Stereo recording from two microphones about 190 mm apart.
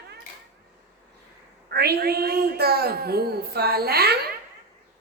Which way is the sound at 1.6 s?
55° right (ahead or behind).